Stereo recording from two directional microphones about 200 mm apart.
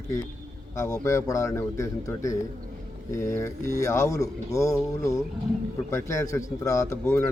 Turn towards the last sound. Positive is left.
turn(degrees=10)  # may be behind; listen again after turning